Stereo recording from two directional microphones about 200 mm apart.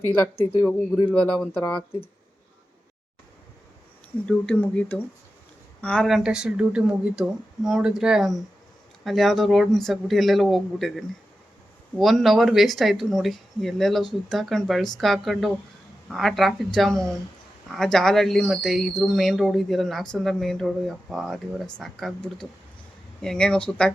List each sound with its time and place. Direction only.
0.6 s speech: 15° left (ahead or behind)
1.1 s speech: 5° left (ahead or behind)
1.6 s speech: 25° left (ahead or behind)
4.3 s speech: 5° left (ahead or behind)